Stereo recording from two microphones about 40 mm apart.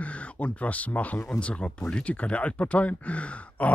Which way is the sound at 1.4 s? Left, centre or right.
Left.